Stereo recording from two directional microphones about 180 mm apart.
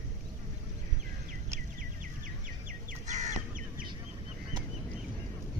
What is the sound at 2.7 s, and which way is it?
Crow, 45° right (ahead or behind).